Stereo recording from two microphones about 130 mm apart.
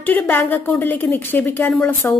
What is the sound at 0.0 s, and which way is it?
A woman's voice, 10° left (ahead or behind).